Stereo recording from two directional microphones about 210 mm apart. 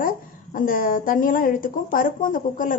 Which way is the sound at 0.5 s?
40° left (ahead or behind).